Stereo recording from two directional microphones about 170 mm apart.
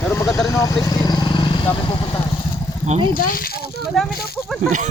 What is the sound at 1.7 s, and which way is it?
Speech, 30° left (ahead or behind).